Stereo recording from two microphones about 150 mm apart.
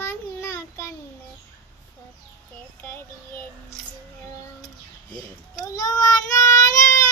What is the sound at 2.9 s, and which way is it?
Child singing, 15° left (ahead or behind).